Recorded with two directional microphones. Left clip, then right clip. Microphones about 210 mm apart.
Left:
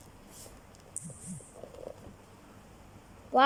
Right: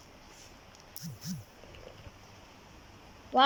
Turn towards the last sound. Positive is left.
turn(degrees=5)  # may be behind; listen again after turning